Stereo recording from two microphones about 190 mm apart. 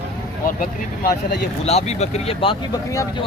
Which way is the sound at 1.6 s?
35° left (ahead or behind).